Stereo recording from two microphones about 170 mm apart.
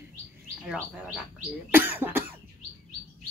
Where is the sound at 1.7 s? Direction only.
10° right (ahead or behind).